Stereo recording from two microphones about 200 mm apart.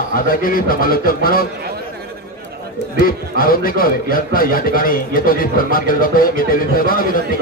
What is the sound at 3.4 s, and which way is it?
A man's voice, 45° left (ahead or behind).